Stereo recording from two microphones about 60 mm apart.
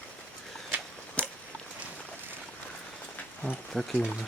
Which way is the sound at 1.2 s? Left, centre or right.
Centre.